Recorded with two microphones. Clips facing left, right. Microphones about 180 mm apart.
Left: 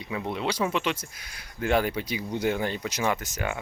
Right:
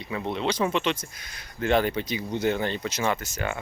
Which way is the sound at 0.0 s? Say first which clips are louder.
Right 2 dB; 10° left (ahead or behind).